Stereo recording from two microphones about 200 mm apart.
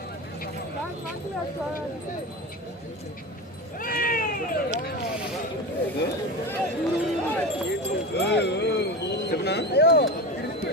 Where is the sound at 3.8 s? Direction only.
45° left (ahead or behind).